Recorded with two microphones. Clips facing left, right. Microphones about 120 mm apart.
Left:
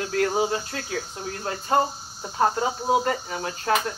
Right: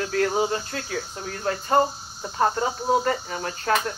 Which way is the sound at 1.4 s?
20° left (ahead or behind).